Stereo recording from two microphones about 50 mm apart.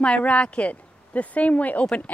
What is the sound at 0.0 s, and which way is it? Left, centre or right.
A woman's voice, left.